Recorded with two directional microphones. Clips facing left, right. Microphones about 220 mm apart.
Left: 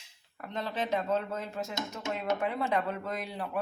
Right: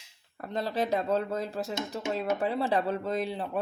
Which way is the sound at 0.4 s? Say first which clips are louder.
Right 4 dB; 35° right (ahead or behind).